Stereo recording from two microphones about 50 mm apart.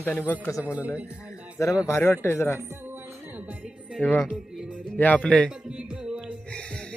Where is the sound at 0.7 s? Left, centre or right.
Right.